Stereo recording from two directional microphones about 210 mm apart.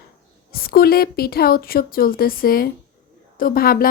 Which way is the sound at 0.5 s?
45° left (ahead or behind).